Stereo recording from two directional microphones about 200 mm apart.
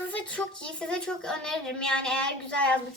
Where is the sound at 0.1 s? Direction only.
5° left (ahead or behind).